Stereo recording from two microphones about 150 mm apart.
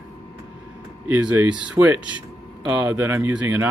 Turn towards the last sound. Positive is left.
turn(degrees=-10)  # may be behind; listen again after turning